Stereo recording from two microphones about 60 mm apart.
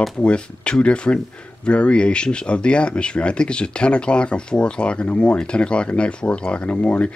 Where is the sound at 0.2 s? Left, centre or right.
Centre.